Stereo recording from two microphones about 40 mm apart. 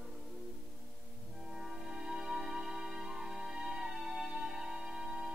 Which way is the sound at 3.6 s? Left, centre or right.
Centre.